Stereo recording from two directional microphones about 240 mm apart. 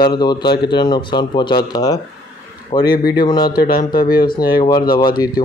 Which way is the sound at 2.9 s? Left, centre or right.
Left.